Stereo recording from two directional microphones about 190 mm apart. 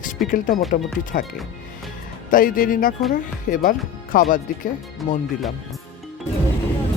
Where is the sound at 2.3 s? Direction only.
50° left (ahead or behind).